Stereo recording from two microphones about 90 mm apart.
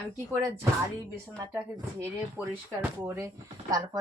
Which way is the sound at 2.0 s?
30° right (ahead or behind).